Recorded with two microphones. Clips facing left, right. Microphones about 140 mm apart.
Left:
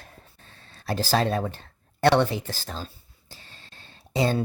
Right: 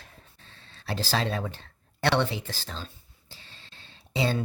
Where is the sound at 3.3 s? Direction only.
45° left (ahead or behind).